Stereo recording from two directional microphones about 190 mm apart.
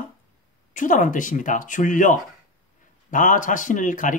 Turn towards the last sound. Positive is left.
turn(degrees=45)  # may be behind; listen again after turning